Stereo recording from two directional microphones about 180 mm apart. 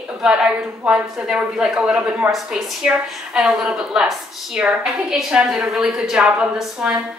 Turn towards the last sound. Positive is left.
turn(degrees=-5)  # may be behind; listen again after turning